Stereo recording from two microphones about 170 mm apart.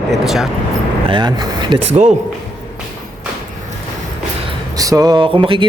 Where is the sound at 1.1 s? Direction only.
25° right (ahead or behind).